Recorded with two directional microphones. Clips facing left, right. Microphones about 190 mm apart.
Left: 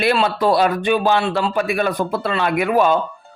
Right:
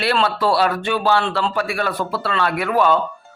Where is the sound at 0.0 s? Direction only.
15° left (ahead or behind).